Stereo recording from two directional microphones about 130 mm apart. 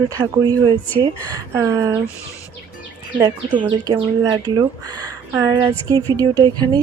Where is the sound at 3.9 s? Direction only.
30° right (ahead or behind).